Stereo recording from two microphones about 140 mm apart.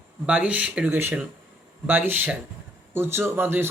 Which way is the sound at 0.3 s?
10° right (ahead or behind).